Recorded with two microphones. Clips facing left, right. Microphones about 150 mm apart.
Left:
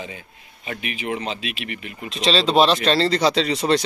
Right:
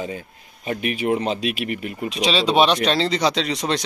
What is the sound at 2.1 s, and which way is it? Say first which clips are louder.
Speech: left 1 dB; centre (ahead or behind).